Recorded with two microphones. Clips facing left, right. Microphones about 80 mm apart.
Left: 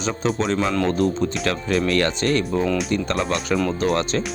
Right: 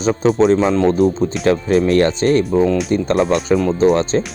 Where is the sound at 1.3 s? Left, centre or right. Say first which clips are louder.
Right 7 dB; centre.